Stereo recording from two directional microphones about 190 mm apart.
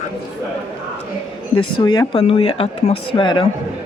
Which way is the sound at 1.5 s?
25° left (ahead or behind).